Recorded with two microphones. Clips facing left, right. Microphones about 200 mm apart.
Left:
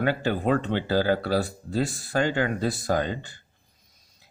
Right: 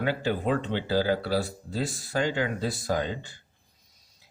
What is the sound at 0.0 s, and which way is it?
Speech, 55° left (ahead or behind).